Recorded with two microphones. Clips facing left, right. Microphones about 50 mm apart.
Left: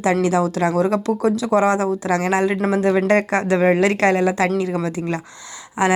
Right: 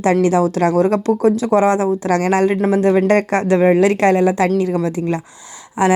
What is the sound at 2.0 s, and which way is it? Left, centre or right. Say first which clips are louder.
Speech: right 4 dB; right.